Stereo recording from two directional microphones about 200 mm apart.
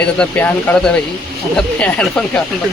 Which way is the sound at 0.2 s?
5° left (ahead or behind).